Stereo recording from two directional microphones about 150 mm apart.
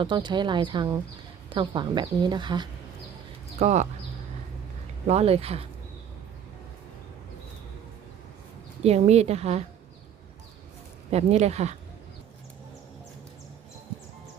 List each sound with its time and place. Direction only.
0.0 s speech: 30° right (ahead or behind)
3.6 s a woman's voice: 50° right (ahead or behind)
5.0 s a woman's voice: 45° right (ahead or behind)
8.8 s a woman's voice: 45° right (ahead or behind)
11.1 s a woman's voice: 45° right (ahead or behind)